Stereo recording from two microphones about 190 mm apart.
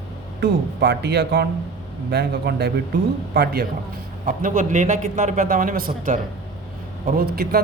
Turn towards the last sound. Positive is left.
turn(degrees=-50)  # may be behind; listen again after turning